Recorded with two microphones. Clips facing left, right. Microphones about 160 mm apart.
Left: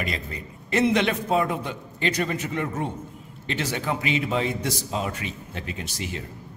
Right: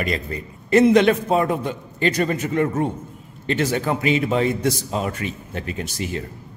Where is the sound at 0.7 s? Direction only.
45° right (ahead or behind).